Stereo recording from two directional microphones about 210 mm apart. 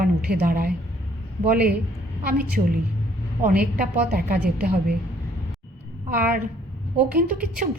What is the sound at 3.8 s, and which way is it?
Speech, 45° right (ahead or behind).